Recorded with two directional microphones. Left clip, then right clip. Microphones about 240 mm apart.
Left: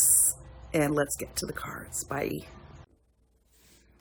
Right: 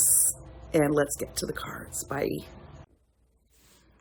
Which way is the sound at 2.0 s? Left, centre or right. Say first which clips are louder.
Right 2 dB; centre.